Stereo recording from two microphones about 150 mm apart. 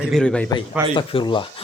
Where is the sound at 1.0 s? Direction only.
30° left (ahead or behind).